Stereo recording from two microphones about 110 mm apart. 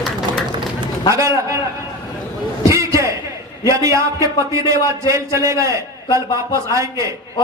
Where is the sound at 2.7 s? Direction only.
25° right (ahead or behind).